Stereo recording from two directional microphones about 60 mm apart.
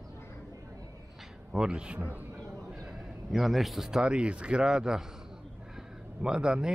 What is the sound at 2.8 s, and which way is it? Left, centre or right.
A man's voice, centre.